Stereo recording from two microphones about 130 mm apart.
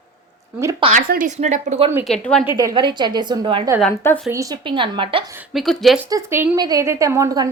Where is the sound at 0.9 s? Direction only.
70° right (ahead or behind).